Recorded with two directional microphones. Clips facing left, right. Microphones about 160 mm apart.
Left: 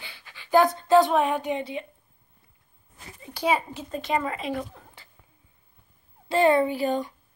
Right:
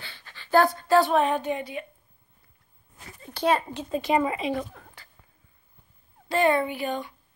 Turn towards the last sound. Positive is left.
turn(degrees=35)  # may be behind; listen again after turning